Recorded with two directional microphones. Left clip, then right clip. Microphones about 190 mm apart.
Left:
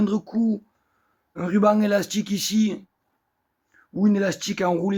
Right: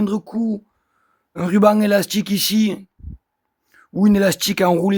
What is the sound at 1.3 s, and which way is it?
Speech, 60° right (ahead or behind).